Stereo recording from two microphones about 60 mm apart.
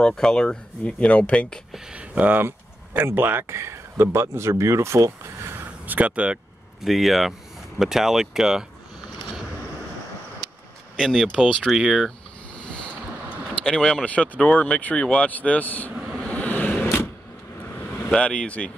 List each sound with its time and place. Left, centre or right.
0.0 s speech: centre
1.9 s speech: right
2.4 s a sound: right
3.1 s speech: right
3.5 s speech: right
5.5 s a sound: right
5.9 s speech: right
6.8 s speech: centre
11.0 s speech: centre
11.7 s speech: centre
13.7 s speech: centre
16.2 s vehicle: left
16.8 s a sound: left
17.9 s speech: centre